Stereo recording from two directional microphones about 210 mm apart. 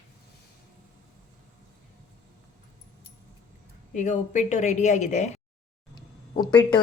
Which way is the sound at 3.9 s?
35° left (ahead or behind).